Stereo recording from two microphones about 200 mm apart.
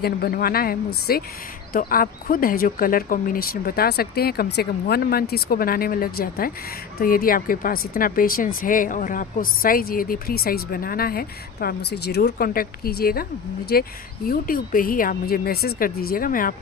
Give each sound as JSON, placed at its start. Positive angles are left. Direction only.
{"t": 0.0, "sound": "speech", "side_deg": 50}